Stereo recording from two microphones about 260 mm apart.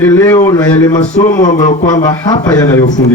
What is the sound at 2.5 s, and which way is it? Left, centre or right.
Speech, centre.